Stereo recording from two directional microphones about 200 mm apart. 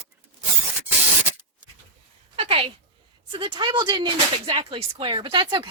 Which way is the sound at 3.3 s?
25° right (ahead or behind).